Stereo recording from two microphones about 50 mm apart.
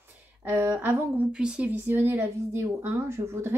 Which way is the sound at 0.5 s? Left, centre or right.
Right.